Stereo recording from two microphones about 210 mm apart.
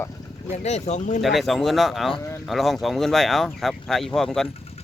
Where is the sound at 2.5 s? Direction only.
Centre (ahead or behind).